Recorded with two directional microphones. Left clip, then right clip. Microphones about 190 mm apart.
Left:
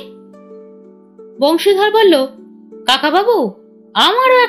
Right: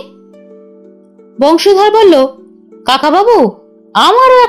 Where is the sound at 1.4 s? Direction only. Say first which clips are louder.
Right 5 dB; 35° right (ahead or behind).